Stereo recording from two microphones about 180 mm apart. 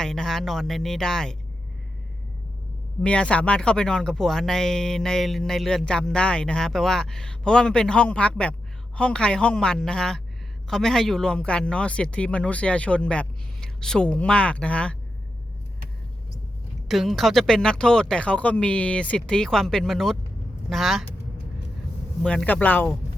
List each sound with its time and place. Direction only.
0.0 s speech: 5° left (ahead or behind)
3.0 s speech: 5° left (ahead or behind)
16.9 s speech: centre (ahead or behind)
22.2 s speech: 5° left (ahead or behind)